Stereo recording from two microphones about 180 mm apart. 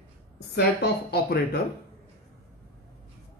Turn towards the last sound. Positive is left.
turn(degrees=60)  # may be behind; listen again after turning